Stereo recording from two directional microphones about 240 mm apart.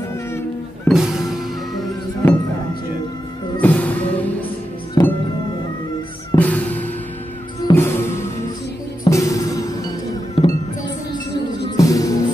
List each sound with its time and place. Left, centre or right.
0.8 s music: centre
3.6 s music: centre
6.3 s music: centre
11.7 s music: centre